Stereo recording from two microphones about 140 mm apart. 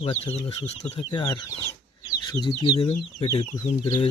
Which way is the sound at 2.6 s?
30° left (ahead or behind).